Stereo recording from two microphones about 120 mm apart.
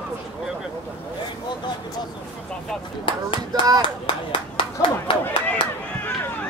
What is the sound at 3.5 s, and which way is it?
Speech, 35° right (ahead or behind).